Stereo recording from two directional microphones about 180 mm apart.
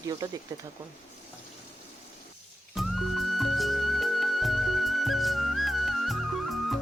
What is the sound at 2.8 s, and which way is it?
Music, centre (ahead or behind).